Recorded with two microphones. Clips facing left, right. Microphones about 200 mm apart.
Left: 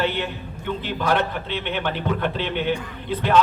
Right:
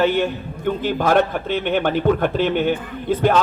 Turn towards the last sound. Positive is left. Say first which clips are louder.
# right 5 dB
turn(degrees=-45)  # may be behind; listen again after turning